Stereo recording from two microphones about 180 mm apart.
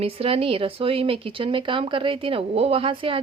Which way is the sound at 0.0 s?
35° right (ahead or behind).